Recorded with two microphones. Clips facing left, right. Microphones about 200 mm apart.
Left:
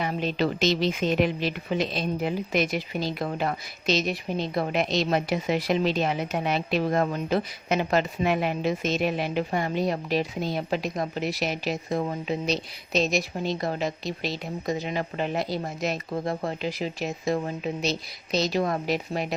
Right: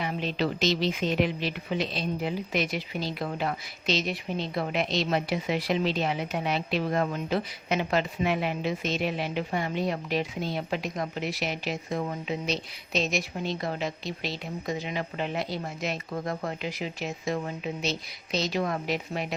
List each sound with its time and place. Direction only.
0.0 s a woman's voice: 45° left (ahead or behind)